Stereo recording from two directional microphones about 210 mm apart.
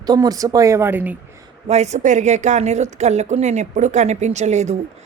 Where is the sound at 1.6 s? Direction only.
30° right (ahead or behind).